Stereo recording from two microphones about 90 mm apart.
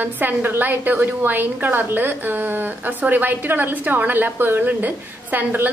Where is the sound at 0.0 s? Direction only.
20° right (ahead or behind).